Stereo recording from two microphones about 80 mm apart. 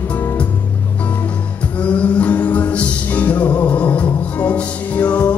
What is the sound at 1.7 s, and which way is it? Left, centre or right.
Music, centre.